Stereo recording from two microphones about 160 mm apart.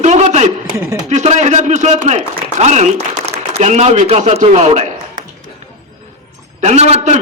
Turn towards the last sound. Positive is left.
turn(degrees=-45)  # may be behind; listen again after turning